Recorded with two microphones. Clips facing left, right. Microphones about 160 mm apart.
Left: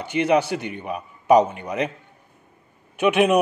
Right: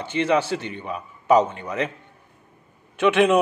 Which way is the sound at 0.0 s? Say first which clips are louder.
Left 2 dB; 15° left (ahead or behind).